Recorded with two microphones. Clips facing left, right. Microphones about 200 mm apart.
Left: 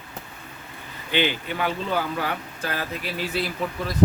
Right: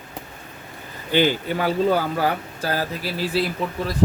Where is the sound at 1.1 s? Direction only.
40° right (ahead or behind).